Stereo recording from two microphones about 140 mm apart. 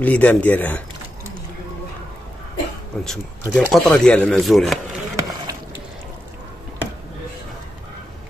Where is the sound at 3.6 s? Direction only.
Centre (ahead or behind).